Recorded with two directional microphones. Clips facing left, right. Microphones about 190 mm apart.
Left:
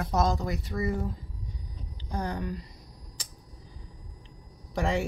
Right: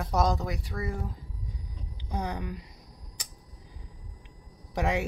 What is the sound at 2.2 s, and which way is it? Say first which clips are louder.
Speech: left 2 dB; 15° right (ahead or behind).